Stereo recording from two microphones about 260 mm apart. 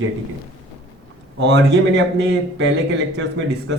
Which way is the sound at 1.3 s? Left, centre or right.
Right.